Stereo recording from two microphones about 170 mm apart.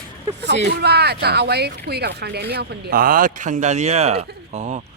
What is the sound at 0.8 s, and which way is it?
Speech, 75° right (ahead or behind).